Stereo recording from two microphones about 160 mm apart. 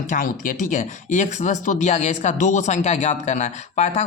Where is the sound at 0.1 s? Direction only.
55° left (ahead or behind).